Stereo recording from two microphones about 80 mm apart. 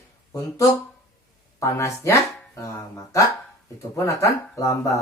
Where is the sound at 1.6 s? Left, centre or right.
Left.